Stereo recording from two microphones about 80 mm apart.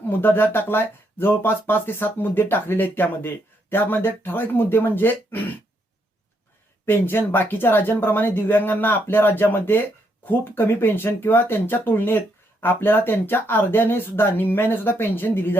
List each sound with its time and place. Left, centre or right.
0.1 s speech: left
6.8 s speech: left